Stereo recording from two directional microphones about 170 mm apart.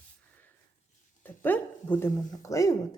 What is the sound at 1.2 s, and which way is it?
Speech, 10° left (ahead or behind).